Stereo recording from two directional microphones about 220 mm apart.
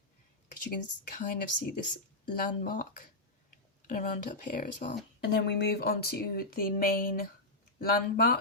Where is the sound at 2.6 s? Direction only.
40° left (ahead or behind).